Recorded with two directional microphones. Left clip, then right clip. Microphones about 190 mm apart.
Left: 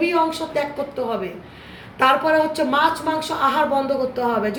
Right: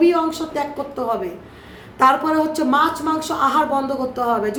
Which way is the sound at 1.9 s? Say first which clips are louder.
Right 1 dB; 25° right (ahead or behind).